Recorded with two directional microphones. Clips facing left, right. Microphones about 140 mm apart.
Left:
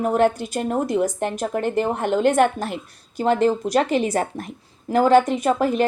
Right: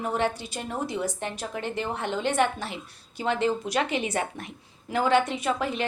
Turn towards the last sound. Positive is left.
turn(degrees=45)  # may be behind; listen again after turning